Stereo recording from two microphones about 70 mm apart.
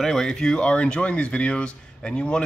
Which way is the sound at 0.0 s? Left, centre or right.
Centre.